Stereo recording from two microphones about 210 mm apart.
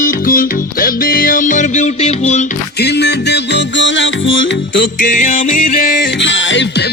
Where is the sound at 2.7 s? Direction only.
55° left (ahead or behind).